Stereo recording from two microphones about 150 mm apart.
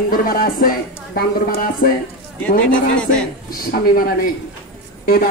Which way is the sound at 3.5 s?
75° left (ahead or behind).